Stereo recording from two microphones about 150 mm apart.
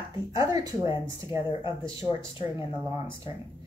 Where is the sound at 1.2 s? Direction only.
35° left (ahead or behind).